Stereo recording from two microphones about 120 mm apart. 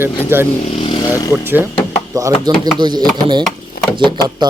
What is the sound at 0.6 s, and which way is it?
Speech, 55° left (ahead or behind).